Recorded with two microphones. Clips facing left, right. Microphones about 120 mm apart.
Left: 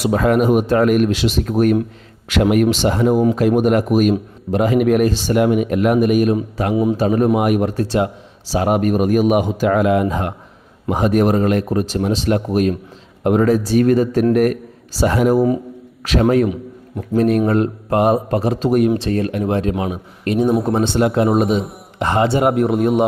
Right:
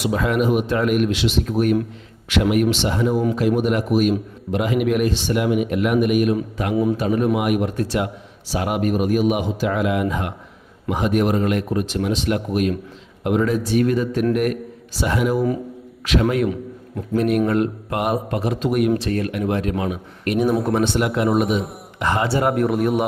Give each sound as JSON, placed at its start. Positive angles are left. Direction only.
{"t": 0.0, "sound": "a man's voice", "side_deg": 45}